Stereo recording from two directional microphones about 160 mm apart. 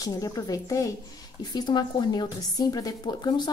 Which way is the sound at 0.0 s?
20° left (ahead or behind).